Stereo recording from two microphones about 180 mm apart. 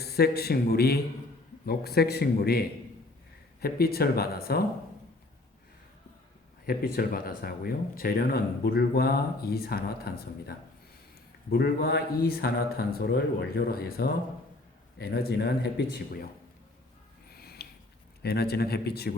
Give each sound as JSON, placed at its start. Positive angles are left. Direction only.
{"t": 0.0, "sound": "speech", "side_deg": 60}
{"t": 6.7, "sound": "speech", "side_deg": 55}
{"t": 17.2, "sound": "a sound", "side_deg": 60}
{"t": 18.2, "sound": "speech", "side_deg": 60}